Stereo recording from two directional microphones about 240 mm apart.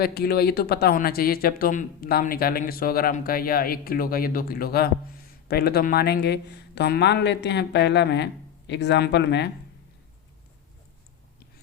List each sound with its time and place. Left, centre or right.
0.0 s speech: left